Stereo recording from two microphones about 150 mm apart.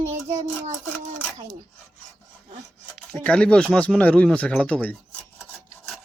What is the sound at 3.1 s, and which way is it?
Speech, 5° left (ahead or behind).